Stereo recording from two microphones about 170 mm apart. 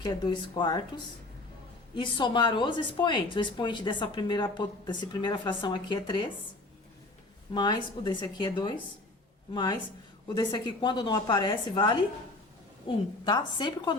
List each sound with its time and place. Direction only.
0.0 s speech: 25° left (ahead or behind)
2.0 s speech: 25° left (ahead or behind)
7.5 s speech: 25° left (ahead or behind)